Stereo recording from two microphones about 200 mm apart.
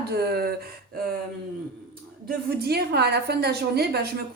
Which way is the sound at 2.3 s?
50° right (ahead or behind).